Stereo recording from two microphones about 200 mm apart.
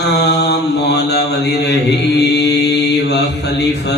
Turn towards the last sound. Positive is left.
turn(degrees=55)  # may be behind; listen again after turning